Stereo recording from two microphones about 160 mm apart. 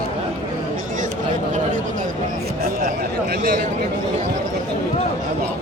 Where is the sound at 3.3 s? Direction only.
65° right (ahead or behind).